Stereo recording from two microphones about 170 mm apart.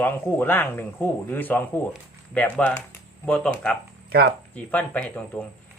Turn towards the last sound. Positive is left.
turn(degrees=10)  # may be behind; listen again after turning